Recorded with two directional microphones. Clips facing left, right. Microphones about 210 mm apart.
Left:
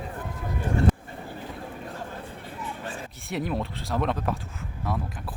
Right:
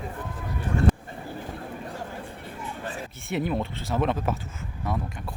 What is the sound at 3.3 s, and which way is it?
Speech, centre (ahead or behind).